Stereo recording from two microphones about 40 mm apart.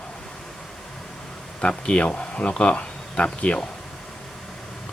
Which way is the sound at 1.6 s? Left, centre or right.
Left.